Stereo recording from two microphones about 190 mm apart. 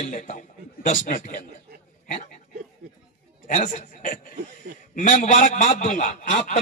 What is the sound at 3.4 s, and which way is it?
A man's voice, 40° left (ahead or behind).